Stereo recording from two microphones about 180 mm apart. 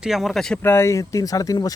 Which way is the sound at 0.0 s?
Centre (ahead or behind).